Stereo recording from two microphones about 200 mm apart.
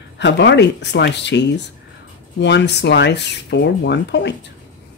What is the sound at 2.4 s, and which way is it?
Speech, 60° left (ahead or behind).